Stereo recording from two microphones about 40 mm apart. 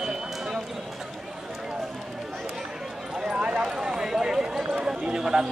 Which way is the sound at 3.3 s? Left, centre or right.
Right.